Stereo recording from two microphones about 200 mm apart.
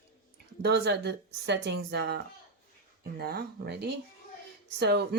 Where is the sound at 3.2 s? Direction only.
50° right (ahead or behind).